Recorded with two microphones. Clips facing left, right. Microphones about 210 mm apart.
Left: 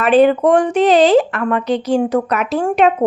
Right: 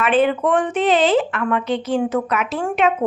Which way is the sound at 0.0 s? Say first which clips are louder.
Left 6 dB; 40° left (ahead or behind).